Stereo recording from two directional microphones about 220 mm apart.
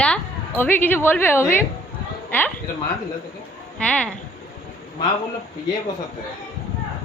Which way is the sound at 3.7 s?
5° left (ahead or behind).